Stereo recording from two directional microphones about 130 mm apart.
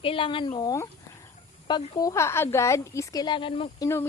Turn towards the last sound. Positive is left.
turn(degrees=20)  # may be behind; listen again after turning